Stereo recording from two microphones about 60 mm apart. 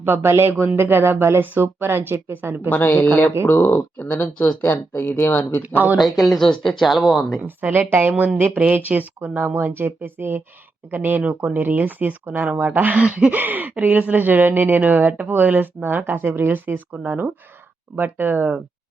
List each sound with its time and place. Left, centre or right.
0.0 s speech: right
2.6 s speech: left
5.6 s speech: right
6.0 s speech: centre
7.4 s speech: right
17.9 s speech: right